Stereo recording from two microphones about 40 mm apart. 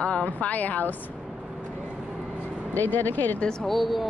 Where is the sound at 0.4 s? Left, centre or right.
Left.